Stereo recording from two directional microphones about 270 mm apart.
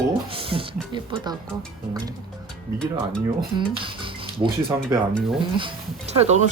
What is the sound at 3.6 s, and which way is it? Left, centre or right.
Speech, centre.